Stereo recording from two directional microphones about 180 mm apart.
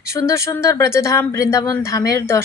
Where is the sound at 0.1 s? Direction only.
15° left (ahead or behind).